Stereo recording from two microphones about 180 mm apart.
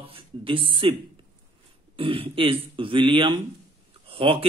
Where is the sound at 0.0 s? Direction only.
30° right (ahead or behind).